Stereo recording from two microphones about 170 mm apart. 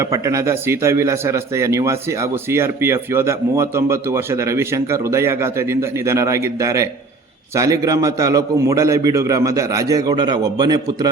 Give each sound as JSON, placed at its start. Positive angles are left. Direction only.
{"t": 0.0, "sound": "a man's voice", "side_deg": -20}